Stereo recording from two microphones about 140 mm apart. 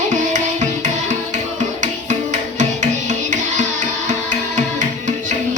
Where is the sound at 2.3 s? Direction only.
60° right (ahead or behind).